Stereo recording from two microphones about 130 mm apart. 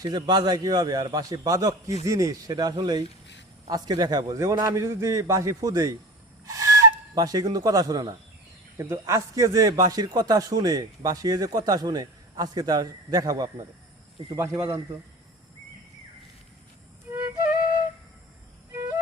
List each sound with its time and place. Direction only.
0.0 s a man's voice: 30° right (ahead or behind)